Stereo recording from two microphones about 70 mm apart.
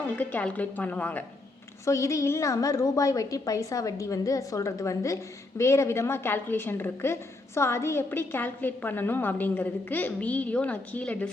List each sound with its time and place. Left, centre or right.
0.2 s a woman's voice: left
1.8 s a woman's voice: left